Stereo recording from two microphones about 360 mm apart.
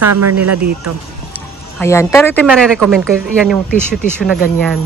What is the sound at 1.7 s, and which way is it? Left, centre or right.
Speech, centre.